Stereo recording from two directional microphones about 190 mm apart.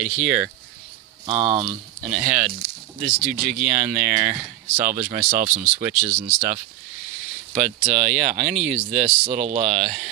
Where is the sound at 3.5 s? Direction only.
40° right (ahead or behind).